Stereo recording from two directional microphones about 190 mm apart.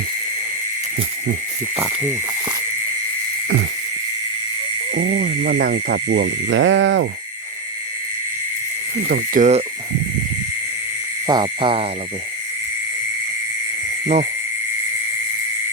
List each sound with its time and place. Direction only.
4.9 s speech: 50° right (ahead or behind); by 7.1 s 75° right (ahead or behind)
9.0 s speech: 50° right (ahead or behind)
11.3 s owl: 25° right (ahead or behind)